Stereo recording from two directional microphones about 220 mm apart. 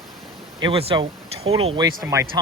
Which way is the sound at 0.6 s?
25° right (ahead or behind).